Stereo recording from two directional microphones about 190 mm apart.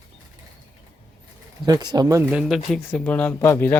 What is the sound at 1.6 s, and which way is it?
Speech, 20° right (ahead or behind).